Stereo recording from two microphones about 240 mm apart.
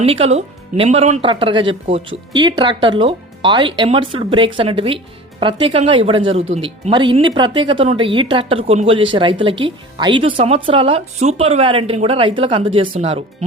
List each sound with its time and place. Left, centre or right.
0.0 s speech: right